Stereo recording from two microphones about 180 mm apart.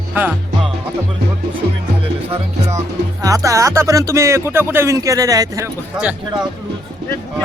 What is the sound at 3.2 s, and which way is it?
Speech, 20° right (ahead or behind).